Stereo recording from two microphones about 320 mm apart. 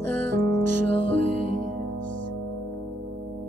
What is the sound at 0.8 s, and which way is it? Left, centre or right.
Music, right.